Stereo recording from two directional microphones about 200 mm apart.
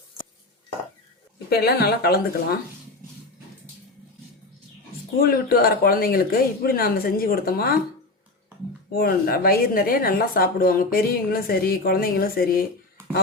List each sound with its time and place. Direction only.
1.5 s a woman's voice: 50° left (ahead or behind)
5.2 s a woman's voice: 50° left (ahead or behind)
8.9 s a woman's voice: 50° left (ahead or behind)